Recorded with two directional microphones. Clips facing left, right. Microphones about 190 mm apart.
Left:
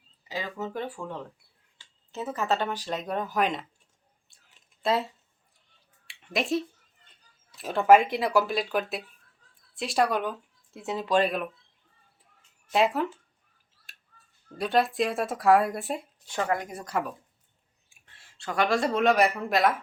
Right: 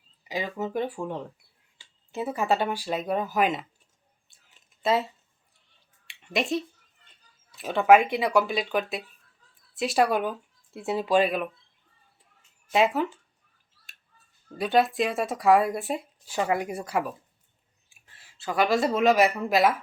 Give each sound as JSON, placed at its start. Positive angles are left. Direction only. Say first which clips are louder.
{"t": 0.3, "sound": "speech", "louder": "right 3 dB", "side_deg": -15}
{"t": 4.3, "sound": "a sound", "louder": "right 2 dB", "side_deg": 0}
{"t": 6.1, "sound": "a sound", "louder": "right 1 dB", "side_deg": 0}
{"t": 7.5, "sound": "speech", "louder": "right 1 dB", "side_deg": 0}
{"t": 12.7, "sound": "speech", "louder": "right 1 dB", "side_deg": 0}
{"t": 14.6, "sound": "speech", "louder": "right 2 dB", "side_deg": 0}